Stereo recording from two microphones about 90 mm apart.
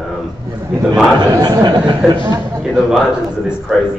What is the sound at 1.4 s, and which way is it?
Speech, 50° right (ahead or behind).